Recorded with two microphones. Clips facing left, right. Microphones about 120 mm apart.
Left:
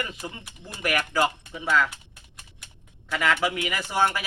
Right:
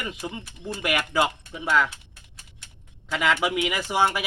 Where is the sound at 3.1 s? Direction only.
15° right (ahead or behind).